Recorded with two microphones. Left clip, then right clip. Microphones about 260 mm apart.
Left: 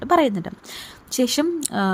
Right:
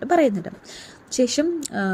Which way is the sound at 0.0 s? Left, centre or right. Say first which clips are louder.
Left 1 dB; centre.